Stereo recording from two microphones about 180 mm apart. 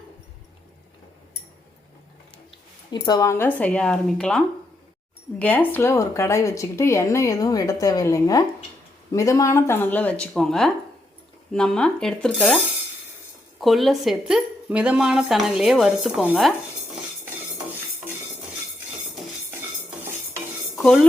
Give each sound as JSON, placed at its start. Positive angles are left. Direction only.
{"t": 2.9, "sound": "a woman's voice", "side_deg": 20}
{"t": 13.6, "sound": "speech", "side_deg": 0}
{"t": 20.7, "sound": "speech", "side_deg": 0}